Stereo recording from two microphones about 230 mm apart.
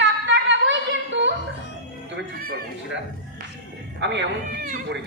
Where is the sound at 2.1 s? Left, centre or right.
Right.